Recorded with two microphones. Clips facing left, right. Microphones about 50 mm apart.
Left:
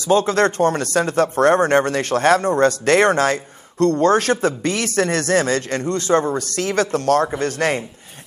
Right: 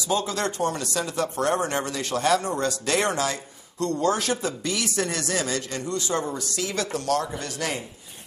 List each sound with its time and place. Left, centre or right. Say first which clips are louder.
0.1 s speech: left 10 dB; left